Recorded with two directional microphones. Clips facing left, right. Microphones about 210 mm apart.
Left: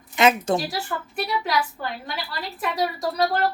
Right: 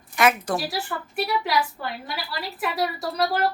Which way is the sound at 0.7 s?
Centre (ahead or behind).